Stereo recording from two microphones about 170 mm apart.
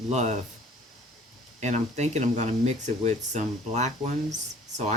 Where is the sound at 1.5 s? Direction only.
40° right (ahead or behind).